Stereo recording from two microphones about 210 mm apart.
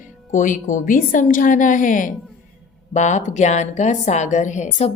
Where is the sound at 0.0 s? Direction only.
35° left (ahead or behind).